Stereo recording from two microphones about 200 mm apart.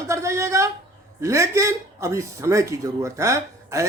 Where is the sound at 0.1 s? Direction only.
15° right (ahead or behind).